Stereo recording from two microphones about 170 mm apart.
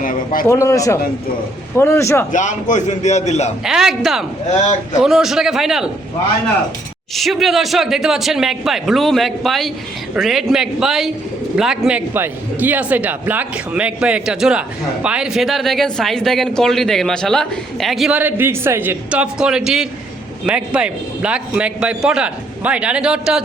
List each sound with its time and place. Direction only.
0.0 s a man's voice: 50° left (ahead or behind)
0.4 s a man's voice: 15° left (ahead or behind)
2.3 s a man's voice: 50° left (ahead or behind)
3.6 s speech: centre (ahead or behind)
4.5 s a man's voice: 45° left (ahead or behind)
5.0 s speech: centre (ahead or behind)
7.2 s a man's voice: centre (ahead or behind)